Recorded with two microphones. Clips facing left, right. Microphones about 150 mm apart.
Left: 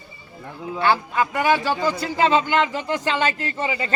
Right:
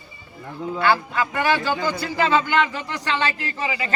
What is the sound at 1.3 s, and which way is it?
A man's voice, 15° left (ahead or behind).